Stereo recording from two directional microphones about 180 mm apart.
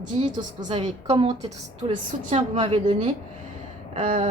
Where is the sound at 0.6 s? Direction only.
40° right (ahead or behind).